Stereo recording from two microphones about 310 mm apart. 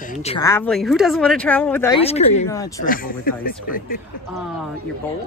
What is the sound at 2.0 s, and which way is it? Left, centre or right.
Speech, centre.